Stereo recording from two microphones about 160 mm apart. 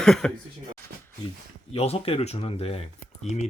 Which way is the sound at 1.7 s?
40° left (ahead or behind).